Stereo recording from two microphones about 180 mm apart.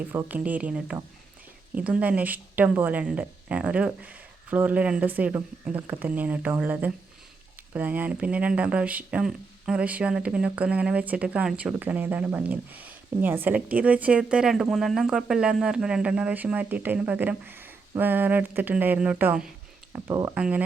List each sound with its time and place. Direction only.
0.1 s speech: 10° right (ahead or behind)
19.9 s speech: 20° right (ahead or behind)
20.3 s speech: 5° right (ahead or behind)